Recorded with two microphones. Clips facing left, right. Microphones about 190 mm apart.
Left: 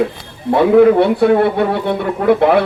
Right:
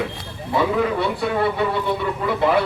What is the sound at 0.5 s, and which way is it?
Speech, 60° left (ahead or behind).